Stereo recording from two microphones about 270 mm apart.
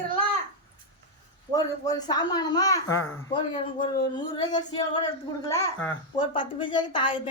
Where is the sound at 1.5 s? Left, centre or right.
Centre.